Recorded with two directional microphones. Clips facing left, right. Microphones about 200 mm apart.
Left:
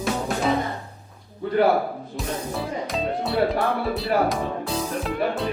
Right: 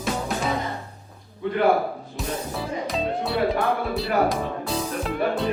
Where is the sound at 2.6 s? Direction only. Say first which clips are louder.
Right 1 dB; centre (ahead or behind).